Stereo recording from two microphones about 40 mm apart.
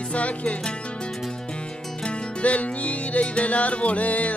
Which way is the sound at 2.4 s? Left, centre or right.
Left.